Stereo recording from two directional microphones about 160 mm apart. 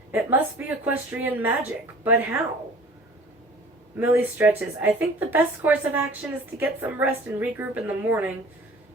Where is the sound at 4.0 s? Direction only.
15° right (ahead or behind).